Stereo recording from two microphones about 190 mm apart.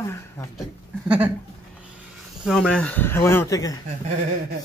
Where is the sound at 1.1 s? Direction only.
10° right (ahead or behind).